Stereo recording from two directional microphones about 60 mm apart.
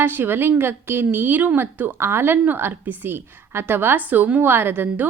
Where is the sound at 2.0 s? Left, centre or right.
Right.